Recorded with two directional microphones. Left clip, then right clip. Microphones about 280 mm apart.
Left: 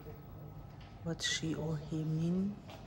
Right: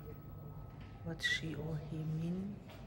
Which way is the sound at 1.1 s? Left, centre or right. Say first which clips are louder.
Left 1 dB; centre.